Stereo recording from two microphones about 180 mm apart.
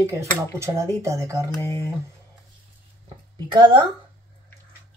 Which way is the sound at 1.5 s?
15° left (ahead or behind).